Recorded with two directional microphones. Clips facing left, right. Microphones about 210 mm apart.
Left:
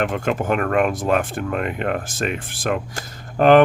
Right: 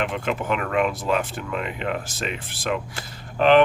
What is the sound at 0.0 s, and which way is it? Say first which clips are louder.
Speech: left 4 dB; 45° left (ahead or behind).